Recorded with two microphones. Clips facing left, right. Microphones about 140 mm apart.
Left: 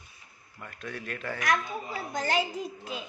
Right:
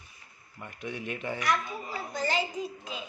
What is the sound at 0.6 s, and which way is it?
Speech, 20° right (ahead or behind).